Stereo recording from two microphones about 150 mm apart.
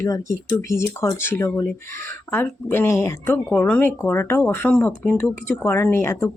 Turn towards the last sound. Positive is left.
turn(degrees=15)  # may be behind; listen again after turning